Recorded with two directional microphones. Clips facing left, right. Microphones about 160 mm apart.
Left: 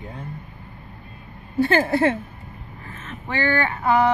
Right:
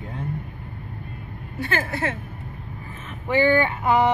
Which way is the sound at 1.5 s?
30° left (ahead or behind).